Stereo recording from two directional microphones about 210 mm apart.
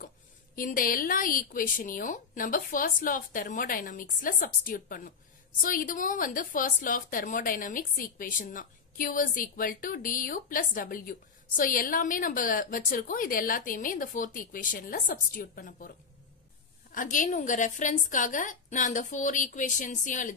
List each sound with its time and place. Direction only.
0.6 s a woman's voice: 40° left (ahead or behind)
16.9 s a woman's voice: 40° left (ahead or behind)